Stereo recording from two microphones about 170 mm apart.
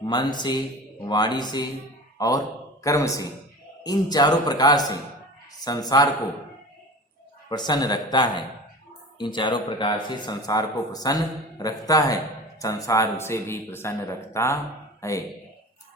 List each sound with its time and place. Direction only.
0.0 s a man's voice: 25° left (ahead or behind)
7.5 s speech: 25° left (ahead or behind)